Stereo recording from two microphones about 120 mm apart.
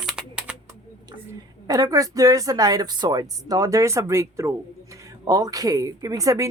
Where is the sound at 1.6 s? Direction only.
30° right (ahead or behind).